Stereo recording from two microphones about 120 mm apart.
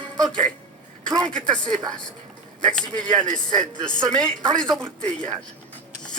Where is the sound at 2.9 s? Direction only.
5° left (ahead or behind).